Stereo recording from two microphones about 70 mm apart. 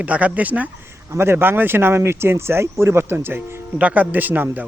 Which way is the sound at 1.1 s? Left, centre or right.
Right.